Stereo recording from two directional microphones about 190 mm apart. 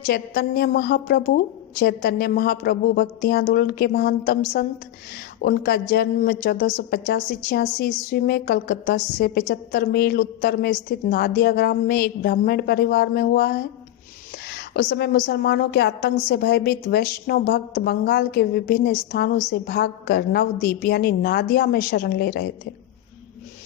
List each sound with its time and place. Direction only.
0.0 s a woman's voice: 55° left (ahead or behind)